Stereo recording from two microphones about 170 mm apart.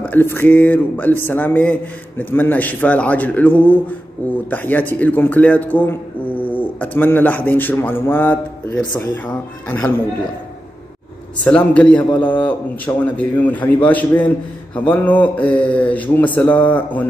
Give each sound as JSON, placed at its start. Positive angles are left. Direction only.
{"t": 0.0, "sound": "a man's voice", "side_deg": 10}
{"t": 11.4, "sound": "a man's voice", "side_deg": 5}